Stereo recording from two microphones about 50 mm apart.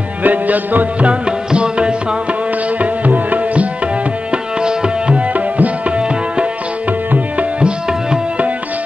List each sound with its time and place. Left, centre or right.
0.2 s music: right
1.2 s music: centre
2.8 s tabla: right
4.3 s tabla: centre
5.3 s music: right